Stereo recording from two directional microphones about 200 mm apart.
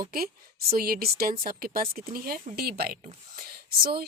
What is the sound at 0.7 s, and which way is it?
A woman's voice, 50° right (ahead or behind).